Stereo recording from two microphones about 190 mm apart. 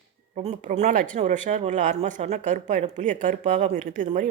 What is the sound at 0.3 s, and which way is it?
A woman's voice, 40° right (ahead or behind).